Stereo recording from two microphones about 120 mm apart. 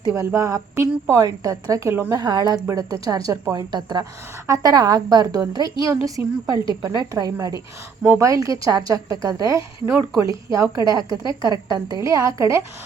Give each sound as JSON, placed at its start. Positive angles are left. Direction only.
{"t": 0.0, "sound": "a woman's voice", "side_deg": -20}
{"t": 2.2, "sound": "a woman's voice", "side_deg": -35}
{"t": 6.2, "sound": "speech", "side_deg": -15}
{"t": 6.5, "sound": "a woman's voice", "side_deg": -35}